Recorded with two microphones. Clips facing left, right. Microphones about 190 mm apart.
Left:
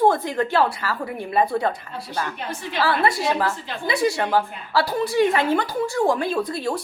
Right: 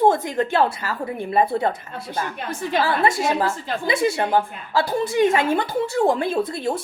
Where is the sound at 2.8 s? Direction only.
20° right (ahead or behind).